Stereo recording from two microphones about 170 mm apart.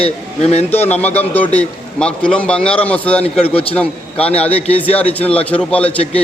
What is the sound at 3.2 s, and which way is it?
A man's voice, 35° left (ahead or behind).